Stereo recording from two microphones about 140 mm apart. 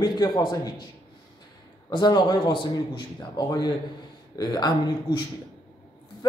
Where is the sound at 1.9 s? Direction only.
30° left (ahead or behind).